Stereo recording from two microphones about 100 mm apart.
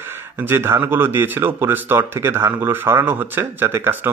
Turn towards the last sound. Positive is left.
turn(degrees=-25)  # may be behind; listen again after turning